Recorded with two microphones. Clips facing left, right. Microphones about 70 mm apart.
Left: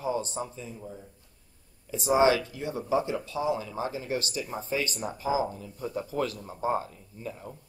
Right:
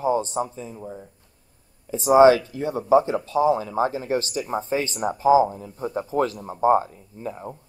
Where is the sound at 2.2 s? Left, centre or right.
Right.